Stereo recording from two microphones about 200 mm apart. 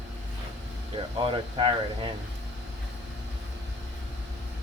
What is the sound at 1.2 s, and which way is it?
Speech, 25° right (ahead or behind).